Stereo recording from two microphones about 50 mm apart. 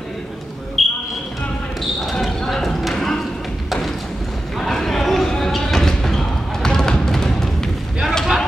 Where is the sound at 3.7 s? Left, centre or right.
Centre.